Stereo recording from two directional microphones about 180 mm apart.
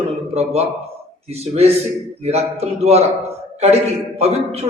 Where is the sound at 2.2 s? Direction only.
35° right (ahead or behind).